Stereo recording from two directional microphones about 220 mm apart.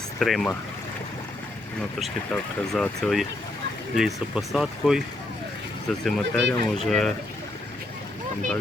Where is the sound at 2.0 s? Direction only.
Centre (ahead or behind).